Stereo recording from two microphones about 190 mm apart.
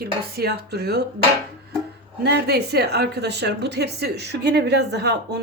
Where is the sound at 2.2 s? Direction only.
60° right (ahead or behind).